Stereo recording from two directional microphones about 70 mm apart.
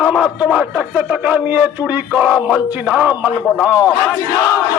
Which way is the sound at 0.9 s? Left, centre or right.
Centre.